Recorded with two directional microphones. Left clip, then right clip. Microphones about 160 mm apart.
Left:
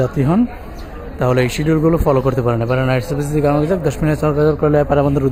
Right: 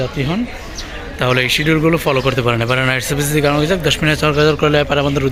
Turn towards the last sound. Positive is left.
turn(degrees=15)  # may be behind; listen again after turning